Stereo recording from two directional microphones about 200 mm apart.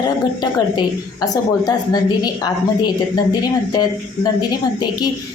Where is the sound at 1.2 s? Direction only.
20° left (ahead or behind).